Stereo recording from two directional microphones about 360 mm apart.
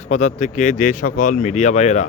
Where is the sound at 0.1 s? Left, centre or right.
Centre.